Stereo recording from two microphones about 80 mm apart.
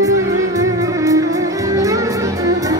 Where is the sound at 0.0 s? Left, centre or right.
Right.